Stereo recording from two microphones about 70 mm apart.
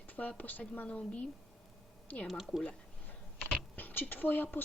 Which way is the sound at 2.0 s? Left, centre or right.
Left.